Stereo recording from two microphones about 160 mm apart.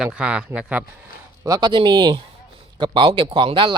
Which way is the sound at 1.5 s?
25° right (ahead or behind).